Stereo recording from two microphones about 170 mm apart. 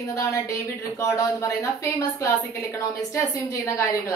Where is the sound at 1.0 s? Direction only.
20° left (ahead or behind).